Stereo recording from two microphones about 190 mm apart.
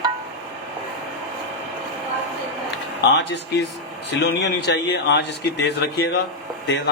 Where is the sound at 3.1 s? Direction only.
65° left (ahead or behind).